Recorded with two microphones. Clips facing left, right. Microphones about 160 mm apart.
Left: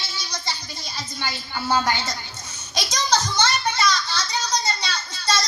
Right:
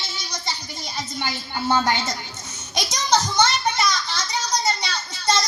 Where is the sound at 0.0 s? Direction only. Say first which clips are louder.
Even; 20° right (ahead or behind).